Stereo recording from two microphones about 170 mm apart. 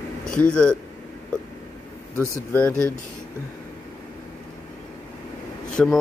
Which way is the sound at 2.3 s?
10° left (ahead or behind).